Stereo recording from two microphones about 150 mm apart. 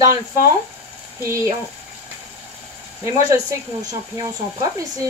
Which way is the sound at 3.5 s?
25° right (ahead or behind).